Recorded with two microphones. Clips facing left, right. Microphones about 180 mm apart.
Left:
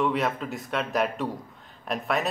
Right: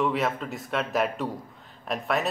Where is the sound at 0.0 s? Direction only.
Centre (ahead or behind).